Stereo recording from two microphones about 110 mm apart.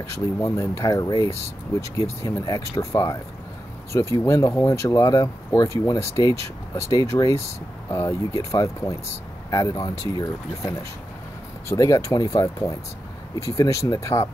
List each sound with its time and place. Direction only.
0.0 s speech: 25° left (ahead or behind)